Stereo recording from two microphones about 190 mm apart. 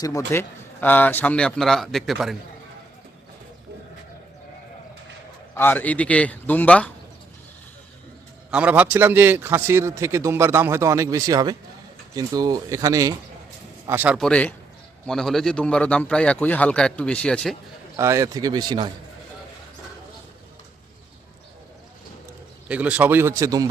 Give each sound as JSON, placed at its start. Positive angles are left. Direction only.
{"t": 0.3, "sound": "a man's voice", "side_deg": 10}
{"t": 5.5, "sound": "a man's voice", "side_deg": 10}
{"t": 8.4, "sound": "a man's voice", "side_deg": -5}
{"t": 14.2, "sound": "a man's voice", "side_deg": 5}
{"t": 17.9, "sound": "speech", "side_deg": -15}
{"t": 22.7, "sound": "a man's voice", "side_deg": -5}